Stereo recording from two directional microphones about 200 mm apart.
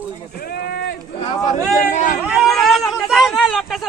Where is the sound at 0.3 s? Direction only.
50° left (ahead or behind).